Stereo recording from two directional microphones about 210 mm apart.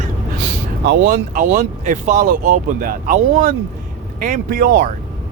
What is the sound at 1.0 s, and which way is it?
Speech, 40° right (ahead or behind).